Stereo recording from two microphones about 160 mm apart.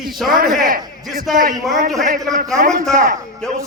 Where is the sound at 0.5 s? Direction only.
60° right (ahead or behind).